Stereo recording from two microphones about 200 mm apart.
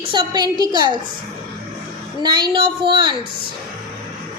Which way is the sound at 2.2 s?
20° right (ahead or behind).